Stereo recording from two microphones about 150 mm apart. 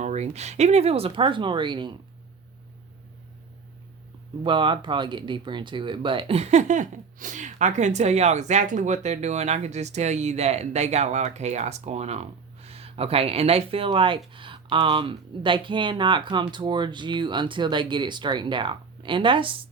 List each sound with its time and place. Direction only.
0.0 s speech: 50° right (ahead or behind); by 2.0 s 30° right (ahead or behind)
4.4 s speech: 35° right (ahead or behind)